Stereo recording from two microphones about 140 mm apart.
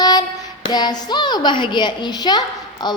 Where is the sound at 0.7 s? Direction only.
30° left (ahead or behind).